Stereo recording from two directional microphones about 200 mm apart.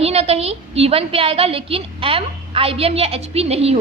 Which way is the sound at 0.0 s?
30° right (ahead or behind).